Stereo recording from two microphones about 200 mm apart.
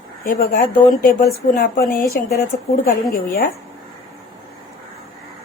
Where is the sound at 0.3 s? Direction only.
45° left (ahead or behind).